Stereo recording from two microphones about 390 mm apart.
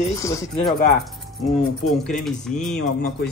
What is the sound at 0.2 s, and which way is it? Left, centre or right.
Speech, centre.